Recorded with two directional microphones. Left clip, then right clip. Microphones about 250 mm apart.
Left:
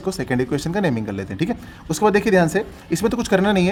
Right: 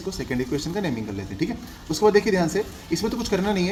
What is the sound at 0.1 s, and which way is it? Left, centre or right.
Speech, left.